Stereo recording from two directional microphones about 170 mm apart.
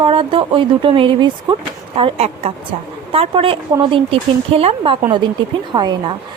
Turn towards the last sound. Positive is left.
turn(degrees=-25)  # may be behind; listen again after turning